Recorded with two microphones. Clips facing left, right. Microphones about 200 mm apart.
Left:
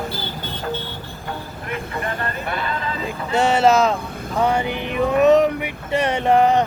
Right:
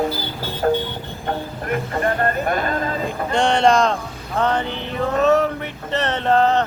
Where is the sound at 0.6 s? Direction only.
50° right (ahead or behind).